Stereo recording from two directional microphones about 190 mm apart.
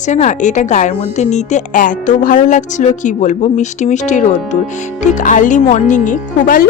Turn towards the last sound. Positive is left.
turn(degrees=45)  # may be behind; listen again after turning